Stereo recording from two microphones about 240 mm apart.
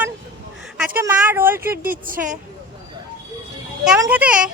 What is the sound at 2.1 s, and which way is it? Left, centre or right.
Speech, right.